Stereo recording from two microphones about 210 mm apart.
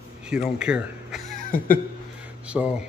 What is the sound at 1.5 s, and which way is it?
Speech, 40° left (ahead or behind).